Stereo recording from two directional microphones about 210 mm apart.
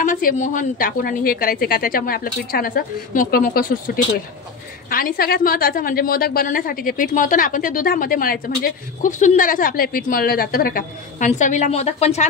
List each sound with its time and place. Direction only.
0.0 s a woman's voice: 40° left (ahead or behind)